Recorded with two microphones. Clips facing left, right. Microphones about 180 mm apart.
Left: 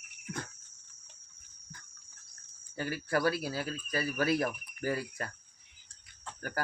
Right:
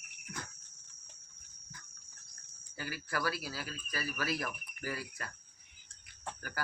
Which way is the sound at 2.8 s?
45° left (ahead or behind).